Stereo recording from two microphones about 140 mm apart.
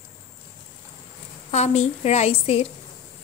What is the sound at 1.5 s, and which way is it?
A woman's voice, 50° left (ahead or behind).